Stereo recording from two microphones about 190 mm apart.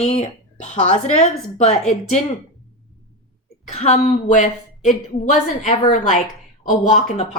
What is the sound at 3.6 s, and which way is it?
A woman's voice, 35° left (ahead or behind).